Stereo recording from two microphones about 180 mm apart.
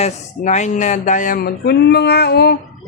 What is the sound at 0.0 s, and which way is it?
Speech, 40° left (ahead or behind).